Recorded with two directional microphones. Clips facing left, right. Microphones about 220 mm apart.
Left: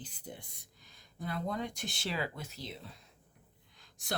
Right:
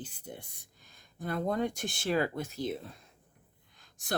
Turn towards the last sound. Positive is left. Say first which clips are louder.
# right 1 dB
turn(degrees=-50)  # may be behind; listen again after turning